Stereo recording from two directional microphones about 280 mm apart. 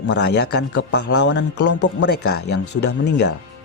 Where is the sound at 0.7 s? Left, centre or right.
Left.